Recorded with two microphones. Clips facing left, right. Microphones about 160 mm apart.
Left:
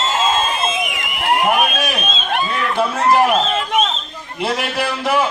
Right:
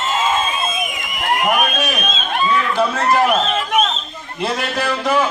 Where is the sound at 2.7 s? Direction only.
10° left (ahead or behind).